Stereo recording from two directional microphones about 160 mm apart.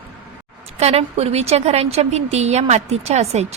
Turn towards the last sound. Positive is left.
turn(degrees=-45)  # may be behind; listen again after turning